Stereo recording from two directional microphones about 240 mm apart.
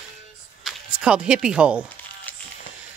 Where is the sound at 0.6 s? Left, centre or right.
Centre.